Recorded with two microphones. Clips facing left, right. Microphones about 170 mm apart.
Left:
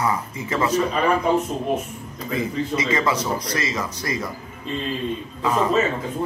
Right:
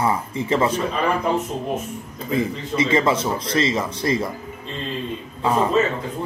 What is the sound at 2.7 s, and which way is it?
A man's voice, 25° right (ahead or behind).